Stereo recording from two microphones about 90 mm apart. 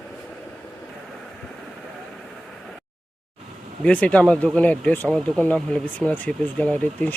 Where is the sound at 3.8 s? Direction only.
15° left (ahead or behind).